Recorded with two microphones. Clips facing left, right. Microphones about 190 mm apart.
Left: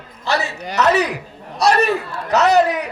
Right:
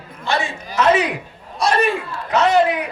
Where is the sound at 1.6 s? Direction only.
40° left (ahead or behind).